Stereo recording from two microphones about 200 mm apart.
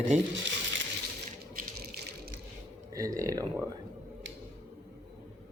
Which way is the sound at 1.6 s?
45° right (ahead or behind).